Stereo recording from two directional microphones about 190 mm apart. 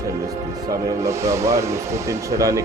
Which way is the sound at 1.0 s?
15° right (ahead or behind).